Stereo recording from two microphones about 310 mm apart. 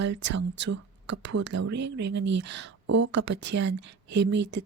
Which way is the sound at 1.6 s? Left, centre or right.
Right.